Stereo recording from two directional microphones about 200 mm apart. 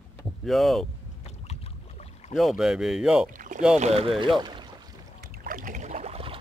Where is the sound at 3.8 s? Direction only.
30° right (ahead or behind).